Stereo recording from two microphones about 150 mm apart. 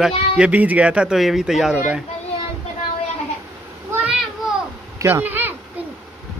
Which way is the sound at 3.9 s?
5° right (ahead or behind).